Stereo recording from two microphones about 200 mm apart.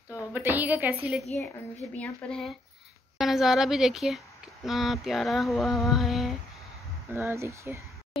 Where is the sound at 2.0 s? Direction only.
5° left (ahead or behind).